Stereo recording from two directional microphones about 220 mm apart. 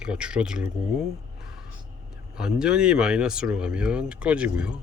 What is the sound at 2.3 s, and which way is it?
Speech, 5° right (ahead or behind).